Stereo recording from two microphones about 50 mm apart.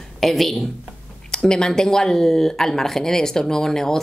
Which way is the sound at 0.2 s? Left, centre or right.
Centre.